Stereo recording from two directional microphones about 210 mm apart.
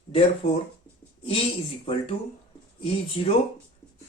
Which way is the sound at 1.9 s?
25° left (ahead or behind).